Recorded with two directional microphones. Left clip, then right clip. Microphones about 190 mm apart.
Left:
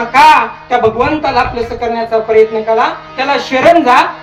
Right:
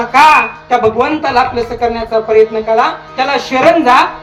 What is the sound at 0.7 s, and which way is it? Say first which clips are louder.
Speech: even; 30° right (ahead or behind).